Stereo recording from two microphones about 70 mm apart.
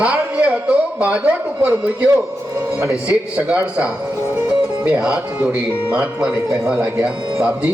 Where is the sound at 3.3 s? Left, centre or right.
Right.